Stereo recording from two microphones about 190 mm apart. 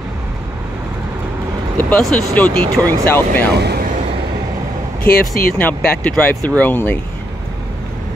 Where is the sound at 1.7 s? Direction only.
5° left (ahead or behind).